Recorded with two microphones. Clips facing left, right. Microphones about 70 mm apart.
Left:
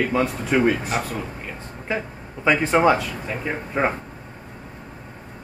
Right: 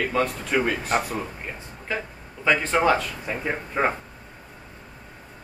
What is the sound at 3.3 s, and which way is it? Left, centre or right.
Speech, centre.